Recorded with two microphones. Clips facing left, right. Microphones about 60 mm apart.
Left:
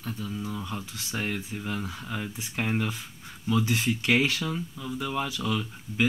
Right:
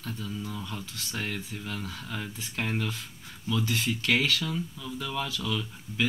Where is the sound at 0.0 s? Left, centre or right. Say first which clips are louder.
Left 2 dB; centre.